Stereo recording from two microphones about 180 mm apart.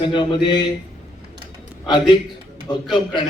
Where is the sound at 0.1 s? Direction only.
25° left (ahead or behind).